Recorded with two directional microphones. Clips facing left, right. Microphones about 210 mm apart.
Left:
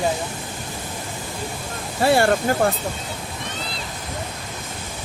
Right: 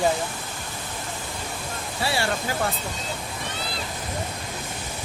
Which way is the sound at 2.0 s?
50° left (ahead or behind).